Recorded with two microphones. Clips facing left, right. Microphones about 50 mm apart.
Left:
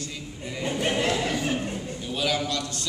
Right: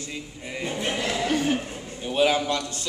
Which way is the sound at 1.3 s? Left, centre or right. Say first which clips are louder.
Right 4 dB; right.